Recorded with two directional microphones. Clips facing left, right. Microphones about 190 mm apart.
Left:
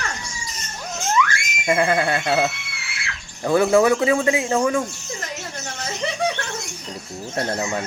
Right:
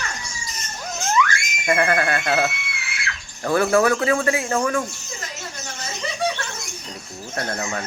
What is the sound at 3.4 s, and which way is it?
Speech, 15° left (ahead or behind).